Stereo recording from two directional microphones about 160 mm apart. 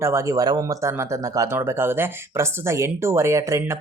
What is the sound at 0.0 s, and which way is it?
Speech, 15° right (ahead or behind).